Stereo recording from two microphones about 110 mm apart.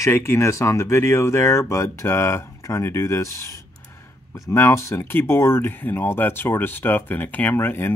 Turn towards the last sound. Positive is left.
turn(degrees=20)  # may be behind; listen again after turning